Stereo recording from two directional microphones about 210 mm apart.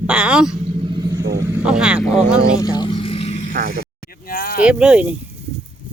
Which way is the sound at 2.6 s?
20° left (ahead or behind).